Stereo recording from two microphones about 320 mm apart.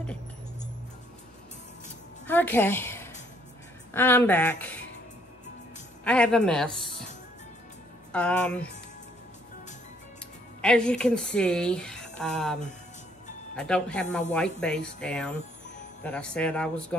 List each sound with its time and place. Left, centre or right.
2.2 s a woman's voice: centre
6.0 s speech: centre
8.1 s speech: centre
10.6 s speech: centre